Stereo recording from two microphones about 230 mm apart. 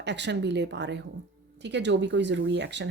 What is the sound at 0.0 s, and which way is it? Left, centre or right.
Speech, right.